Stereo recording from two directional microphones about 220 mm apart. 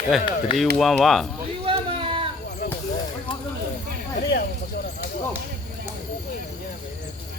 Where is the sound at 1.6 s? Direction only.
25° right (ahead or behind).